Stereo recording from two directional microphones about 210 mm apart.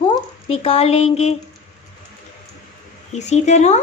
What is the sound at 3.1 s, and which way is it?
Speech, 35° left (ahead or behind).